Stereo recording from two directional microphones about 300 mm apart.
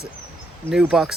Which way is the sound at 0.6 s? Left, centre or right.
Centre.